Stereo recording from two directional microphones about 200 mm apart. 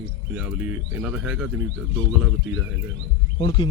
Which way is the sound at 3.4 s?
25° left (ahead or behind).